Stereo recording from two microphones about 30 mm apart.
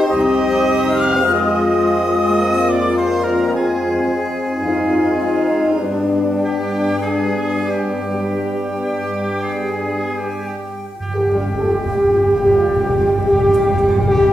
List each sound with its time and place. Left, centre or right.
0.2 s music: right
11.6 s music: centre
14.0 s music: centre